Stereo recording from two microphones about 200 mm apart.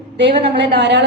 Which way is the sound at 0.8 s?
55° right (ahead or behind).